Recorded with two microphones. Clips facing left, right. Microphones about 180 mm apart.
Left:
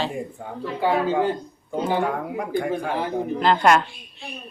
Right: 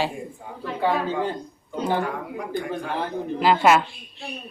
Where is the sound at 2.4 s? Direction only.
55° left (ahead or behind).